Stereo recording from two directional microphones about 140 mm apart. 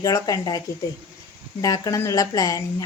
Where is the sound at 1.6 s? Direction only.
25° left (ahead or behind).